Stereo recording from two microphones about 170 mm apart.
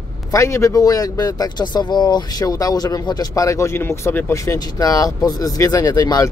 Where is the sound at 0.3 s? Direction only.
15° left (ahead or behind).